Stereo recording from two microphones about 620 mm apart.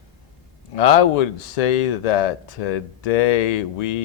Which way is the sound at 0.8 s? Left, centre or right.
Left.